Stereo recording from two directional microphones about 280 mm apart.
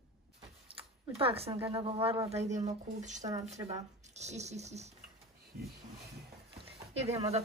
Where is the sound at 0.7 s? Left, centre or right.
Centre.